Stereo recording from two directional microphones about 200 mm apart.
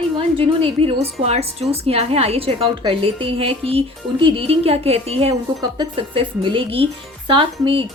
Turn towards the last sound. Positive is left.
turn(degrees=-25)  # may be behind; listen again after turning